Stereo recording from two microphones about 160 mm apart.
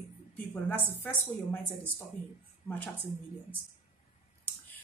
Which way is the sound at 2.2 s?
60° left (ahead or behind).